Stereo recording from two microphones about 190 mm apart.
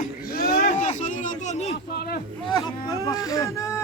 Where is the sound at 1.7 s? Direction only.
55° left (ahead or behind).